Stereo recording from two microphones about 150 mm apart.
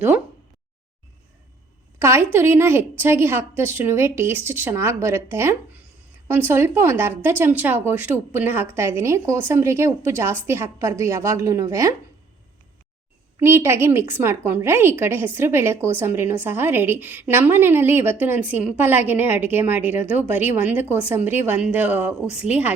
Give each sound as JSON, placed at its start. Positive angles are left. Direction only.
{"t": 2.0, "sound": "a woman's voice", "side_deg": -15}
{"t": 13.4, "sound": "a woman's voice", "side_deg": -15}